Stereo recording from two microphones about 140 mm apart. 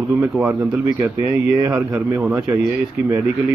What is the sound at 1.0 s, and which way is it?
Speech, 20° right (ahead or behind).